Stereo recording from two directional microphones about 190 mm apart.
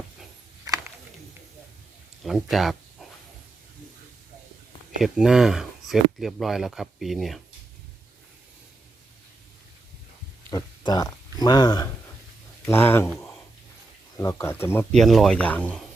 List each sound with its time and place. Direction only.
0.6 s a sound: 20° right (ahead or behind)
2.2 s speech: centre (ahead or behind)
5.0 s speech: 5° right (ahead or behind)
10.5 s speech: 20° left (ahead or behind); by 13.4 s 5° left (ahead or behind)
14.2 s speech: 15° left (ahead or behind)
15.0 s speech: centre (ahead or behind)